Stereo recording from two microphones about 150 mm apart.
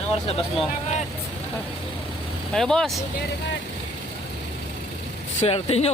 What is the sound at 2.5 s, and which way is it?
Speech, 5° left (ahead or behind).